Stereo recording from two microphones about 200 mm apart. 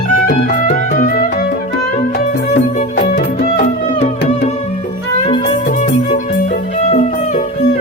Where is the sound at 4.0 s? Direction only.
30° left (ahead or behind).